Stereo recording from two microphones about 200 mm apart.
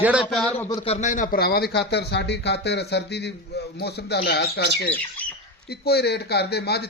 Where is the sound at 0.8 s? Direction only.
35° left (ahead or behind).